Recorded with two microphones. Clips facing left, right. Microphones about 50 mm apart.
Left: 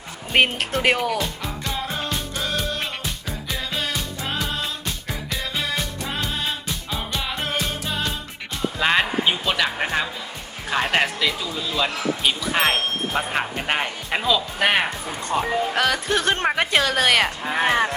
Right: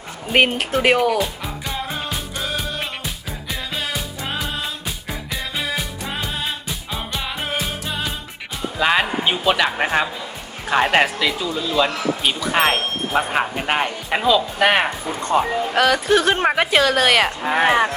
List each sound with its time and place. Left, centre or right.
0.3 s music: centre
8.8 s speech: centre
11.0 s speech: centre
17.4 s speech: right
17.7 s speech: centre